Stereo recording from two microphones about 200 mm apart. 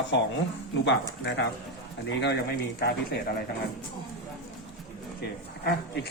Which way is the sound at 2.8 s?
55° left (ahead or behind).